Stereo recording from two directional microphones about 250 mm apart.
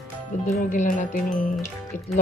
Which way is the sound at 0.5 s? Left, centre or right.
Left.